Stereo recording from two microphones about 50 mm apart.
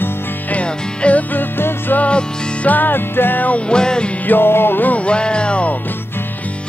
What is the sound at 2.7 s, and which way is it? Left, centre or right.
Music, left.